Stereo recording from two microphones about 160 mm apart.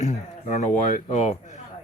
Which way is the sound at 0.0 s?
45° left (ahead or behind).